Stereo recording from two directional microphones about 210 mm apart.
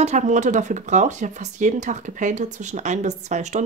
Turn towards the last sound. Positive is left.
turn(degrees=-35)  # may be behind; listen again after turning